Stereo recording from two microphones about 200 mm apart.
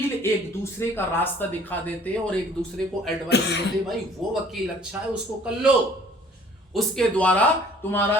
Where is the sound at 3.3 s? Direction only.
55° left (ahead or behind).